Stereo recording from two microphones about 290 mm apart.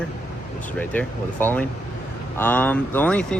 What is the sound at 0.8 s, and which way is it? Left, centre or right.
Speech, centre.